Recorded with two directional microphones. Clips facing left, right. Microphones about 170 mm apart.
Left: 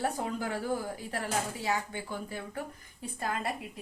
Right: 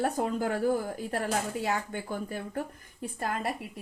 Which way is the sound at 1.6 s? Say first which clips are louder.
Right 2 dB; 50° right (ahead or behind).